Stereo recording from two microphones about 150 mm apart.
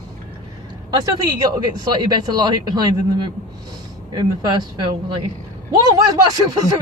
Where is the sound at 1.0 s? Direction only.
25° right (ahead or behind).